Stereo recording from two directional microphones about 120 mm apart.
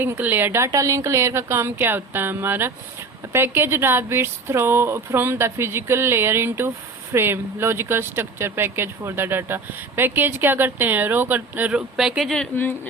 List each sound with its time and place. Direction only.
0.0 s speech: 15° right (ahead or behind)
11.9 s speech: 5° right (ahead or behind)